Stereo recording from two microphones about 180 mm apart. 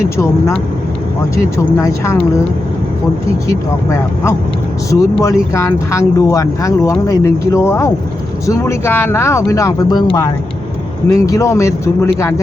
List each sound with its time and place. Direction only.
1.5 s speech: 15° left (ahead or behind)
3.9 s speech: 15° left (ahead or behind)
11.1 s speech: 15° left (ahead or behind)